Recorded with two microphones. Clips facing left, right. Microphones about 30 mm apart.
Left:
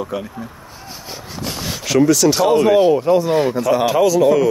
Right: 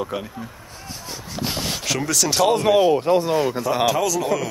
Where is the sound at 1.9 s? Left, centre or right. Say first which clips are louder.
Left 11 dB; centre.